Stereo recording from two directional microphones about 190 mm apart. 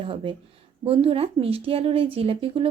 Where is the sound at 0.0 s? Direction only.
30° right (ahead or behind).